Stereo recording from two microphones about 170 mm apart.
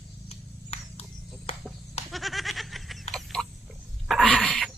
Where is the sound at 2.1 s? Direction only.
Centre (ahead or behind).